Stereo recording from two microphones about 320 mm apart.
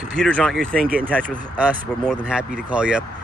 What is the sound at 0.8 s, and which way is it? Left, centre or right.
Speech, right.